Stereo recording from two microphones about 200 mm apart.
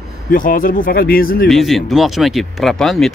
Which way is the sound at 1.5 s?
Centre (ahead or behind).